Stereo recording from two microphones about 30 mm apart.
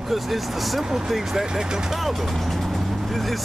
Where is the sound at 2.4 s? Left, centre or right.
Centre.